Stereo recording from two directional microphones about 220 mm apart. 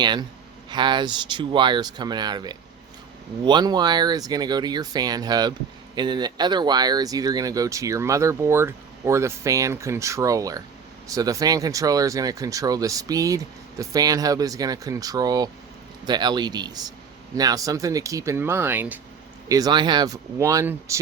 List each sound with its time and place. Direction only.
0.0 s speech: 20° right (ahead or behind)